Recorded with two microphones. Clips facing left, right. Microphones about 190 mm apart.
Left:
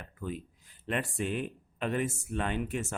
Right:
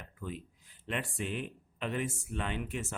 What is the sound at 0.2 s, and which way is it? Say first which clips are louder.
Speech: left 4 dB; 45° left (ahead or behind).